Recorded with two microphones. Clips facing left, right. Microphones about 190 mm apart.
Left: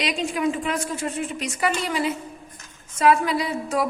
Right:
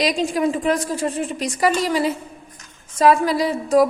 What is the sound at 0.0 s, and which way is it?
A woman's voice, 40° right (ahead or behind).